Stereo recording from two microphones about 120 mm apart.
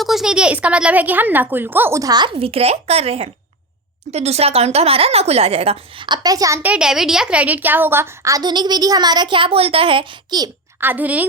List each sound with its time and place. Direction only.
0.0 s a woman's voice: centre (ahead or behind); by 2.3 s 35° right (ahead or behind)
2.3 s speech: 55° right (ahead or behind); by 6.6 s 30° right (ahead or behind)
6.6 s a woman's voice: 10° right (ahead or behind); by 10.1 s 50° right (ahead or behind)
10.3 s a woman's voice: 35° right (ahead or behind)
10.8 s a woman's voice: 15° right (ahead or behind)